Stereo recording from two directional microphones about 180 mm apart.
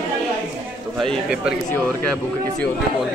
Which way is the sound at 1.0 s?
Centre (ahead or behind).